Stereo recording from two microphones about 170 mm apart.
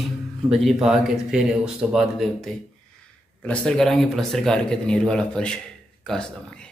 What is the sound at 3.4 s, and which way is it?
A man's voice, 5° left (ahead or behind).